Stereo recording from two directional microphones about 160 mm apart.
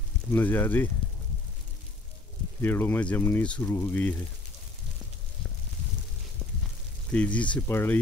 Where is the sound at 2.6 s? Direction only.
15° left (ahead or behind).